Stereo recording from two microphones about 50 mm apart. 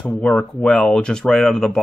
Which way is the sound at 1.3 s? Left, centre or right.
Centre.